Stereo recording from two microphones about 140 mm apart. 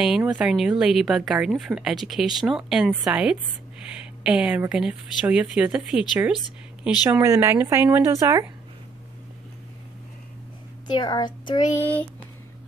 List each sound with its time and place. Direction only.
0.0 s speech: 5° right (ahead or behind)
10.9 s a woman's voice: 30° left (ahead or behind)
11.7 s speech: 15° left (ahead or behind)